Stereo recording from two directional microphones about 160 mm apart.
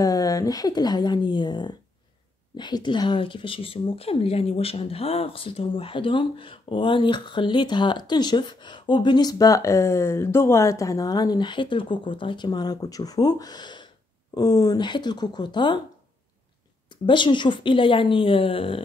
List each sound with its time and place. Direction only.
0.0 s speech: 20° left (ahead or behind)
16.9 s a woman's voice: 30° left (ahead or behind)